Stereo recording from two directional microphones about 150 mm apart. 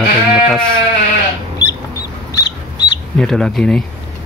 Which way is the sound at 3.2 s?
5° left (ahead or behind).